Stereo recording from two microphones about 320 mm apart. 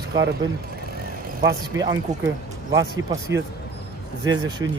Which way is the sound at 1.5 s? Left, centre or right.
Centre.